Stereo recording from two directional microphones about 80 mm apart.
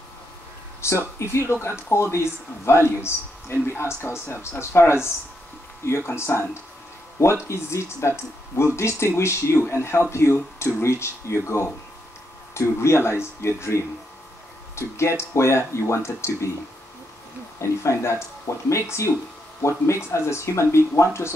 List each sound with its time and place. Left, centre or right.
0.7 s speech: left
7.4 s speech: left
17.6 s speech: left